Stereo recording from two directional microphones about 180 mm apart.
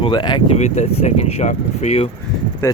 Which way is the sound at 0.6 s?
40° left (ahead or behind).